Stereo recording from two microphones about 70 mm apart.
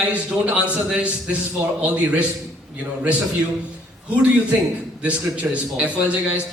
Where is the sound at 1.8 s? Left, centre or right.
Centre.